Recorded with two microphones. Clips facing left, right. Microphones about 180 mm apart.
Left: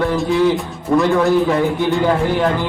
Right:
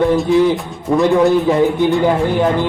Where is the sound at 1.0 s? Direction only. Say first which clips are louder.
Right 5 dB; 20° right (ahead or behind).